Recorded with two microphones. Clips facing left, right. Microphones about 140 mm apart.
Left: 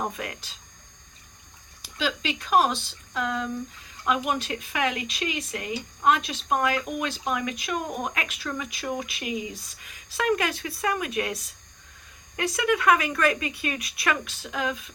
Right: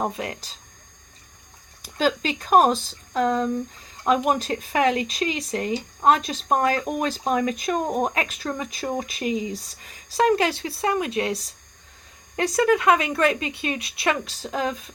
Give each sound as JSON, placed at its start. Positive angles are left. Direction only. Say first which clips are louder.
{"t": 0.0, "sound": "a woman's voice", "louder": "right 4 dB", "side_deg": -30}
{"t": 1.8, "sound": "speech", "louder": "right 6 dB", "side_deg": -45}
{"t": 12.8, "sound": "a woman's voice", "louder": "right 2 dB", "side_deg": -25}